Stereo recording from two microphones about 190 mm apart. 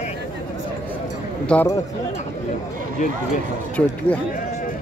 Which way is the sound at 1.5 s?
5° left (ahead or behind).